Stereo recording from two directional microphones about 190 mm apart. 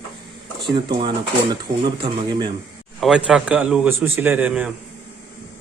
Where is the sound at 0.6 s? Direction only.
25° right (ahead or behind).